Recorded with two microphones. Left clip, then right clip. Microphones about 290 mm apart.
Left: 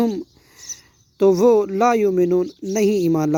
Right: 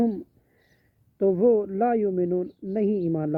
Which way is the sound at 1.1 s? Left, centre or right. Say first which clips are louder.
Left 6 dB; centre.